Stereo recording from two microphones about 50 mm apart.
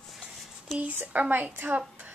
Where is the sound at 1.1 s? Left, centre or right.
Right.